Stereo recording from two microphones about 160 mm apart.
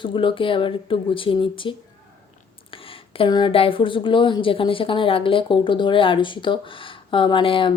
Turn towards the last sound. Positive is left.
turn(degrees=35)  # may be behind; listen again after turning